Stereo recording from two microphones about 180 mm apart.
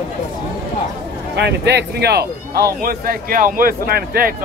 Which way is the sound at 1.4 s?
70° right (ahead or behind).